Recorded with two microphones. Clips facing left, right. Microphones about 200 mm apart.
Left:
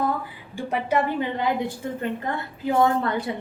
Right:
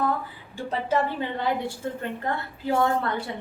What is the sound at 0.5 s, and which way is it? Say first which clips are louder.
A woman's voice: left 2 dB; 15° left (ahead or behind).